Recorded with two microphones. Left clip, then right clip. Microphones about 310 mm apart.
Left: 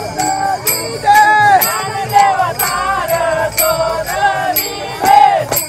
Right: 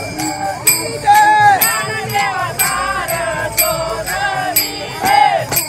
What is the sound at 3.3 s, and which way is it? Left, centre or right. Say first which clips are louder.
Music: left 3 dB; left.